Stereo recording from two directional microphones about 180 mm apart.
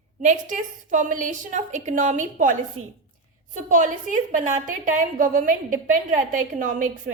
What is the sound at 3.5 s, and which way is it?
A woman's voice, 45° right (ahead or behind).